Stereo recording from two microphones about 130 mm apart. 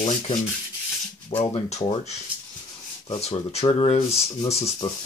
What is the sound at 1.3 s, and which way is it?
Speech, 50° left (ahead or behind).